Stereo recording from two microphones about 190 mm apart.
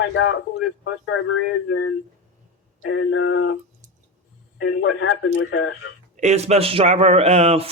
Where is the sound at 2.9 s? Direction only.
90° left.